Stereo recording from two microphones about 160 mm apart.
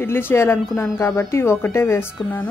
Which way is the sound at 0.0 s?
15° left (ahead or behind).